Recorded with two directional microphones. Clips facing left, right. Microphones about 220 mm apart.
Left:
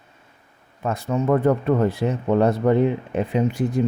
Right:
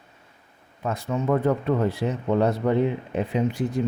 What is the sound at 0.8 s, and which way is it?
Speech, 50° left (ahead or behind).